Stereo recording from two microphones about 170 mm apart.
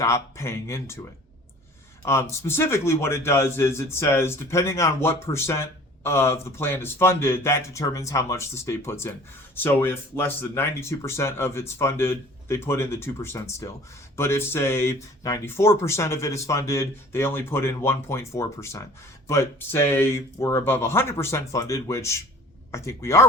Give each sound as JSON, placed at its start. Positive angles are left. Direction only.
{"t": 0.0, "sound": "a man's voice", "side_deg": 15}
{"t": 2.0, "sound": "a man's voice", "side_deg": 15}